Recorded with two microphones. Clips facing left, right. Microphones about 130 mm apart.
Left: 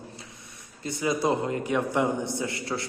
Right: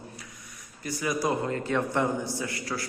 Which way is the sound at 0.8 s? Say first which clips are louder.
Left 2 dB; 25° left (ahead or behind).